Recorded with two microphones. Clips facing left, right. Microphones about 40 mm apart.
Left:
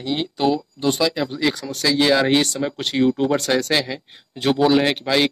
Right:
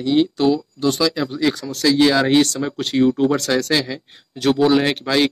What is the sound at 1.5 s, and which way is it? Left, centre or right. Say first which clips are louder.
Speech: right 1 dB; left.